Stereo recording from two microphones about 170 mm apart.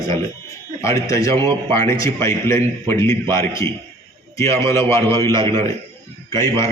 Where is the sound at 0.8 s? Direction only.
20° left (ahead or behind).